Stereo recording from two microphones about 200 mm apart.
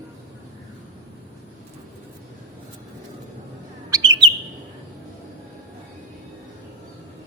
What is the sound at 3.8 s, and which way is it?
Bird, 20° right (ahead or behind).